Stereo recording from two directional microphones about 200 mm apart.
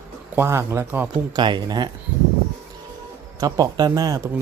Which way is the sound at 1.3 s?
20° right (ahead or behind).